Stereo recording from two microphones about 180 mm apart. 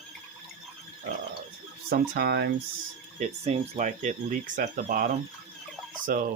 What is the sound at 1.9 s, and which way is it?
Speech, 60° right (ahead or behind).